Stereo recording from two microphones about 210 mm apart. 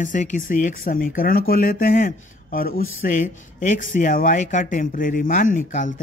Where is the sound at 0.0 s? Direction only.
35° left (ahead or behind).